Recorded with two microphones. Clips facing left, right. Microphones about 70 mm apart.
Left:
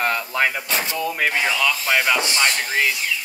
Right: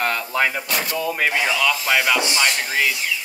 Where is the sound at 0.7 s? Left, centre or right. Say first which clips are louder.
Even; left.